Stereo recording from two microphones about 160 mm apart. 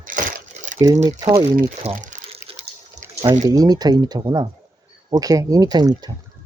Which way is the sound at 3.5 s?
25° right (ahead or behind).